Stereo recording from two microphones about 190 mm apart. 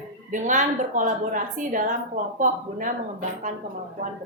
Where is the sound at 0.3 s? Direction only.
40° right (ahead or behind).